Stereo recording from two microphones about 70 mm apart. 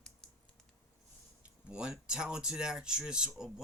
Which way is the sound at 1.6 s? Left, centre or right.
Centre.